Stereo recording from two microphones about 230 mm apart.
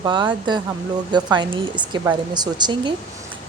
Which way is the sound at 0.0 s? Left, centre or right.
Centre.